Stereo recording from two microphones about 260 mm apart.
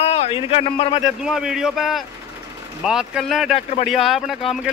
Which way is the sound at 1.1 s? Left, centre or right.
Centre.